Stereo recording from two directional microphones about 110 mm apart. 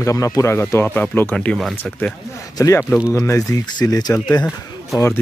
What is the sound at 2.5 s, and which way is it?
Speech, 30° left (ahead or behind).